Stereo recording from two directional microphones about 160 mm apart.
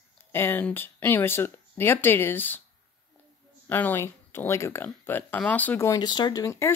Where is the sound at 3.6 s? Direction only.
10° left (ahead or behind).